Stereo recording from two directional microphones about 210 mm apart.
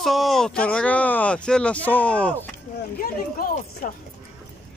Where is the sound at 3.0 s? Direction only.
45° left (ahead or behind).